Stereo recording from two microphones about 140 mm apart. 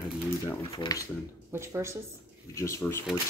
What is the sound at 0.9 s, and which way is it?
Speech, 25° left (ahead or behind).